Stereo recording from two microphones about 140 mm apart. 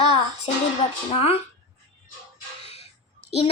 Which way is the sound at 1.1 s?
45° left (ahead or behind).